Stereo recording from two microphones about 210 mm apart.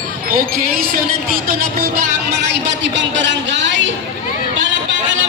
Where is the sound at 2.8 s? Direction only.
60° right (ahead or behind).